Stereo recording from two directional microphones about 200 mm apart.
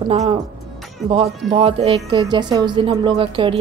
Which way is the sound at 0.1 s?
30° right (ahead or behind).